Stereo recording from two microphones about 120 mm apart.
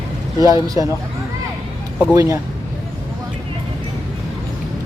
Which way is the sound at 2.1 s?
30° right (ahead or behind).